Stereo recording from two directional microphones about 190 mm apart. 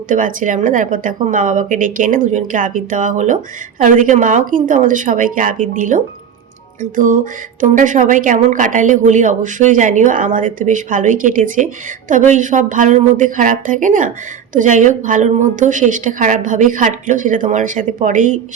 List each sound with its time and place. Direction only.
0.1 s a woman's voice: 45° right (ahead or behind)